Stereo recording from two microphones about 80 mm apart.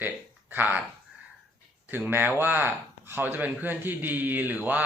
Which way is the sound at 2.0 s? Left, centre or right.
Right.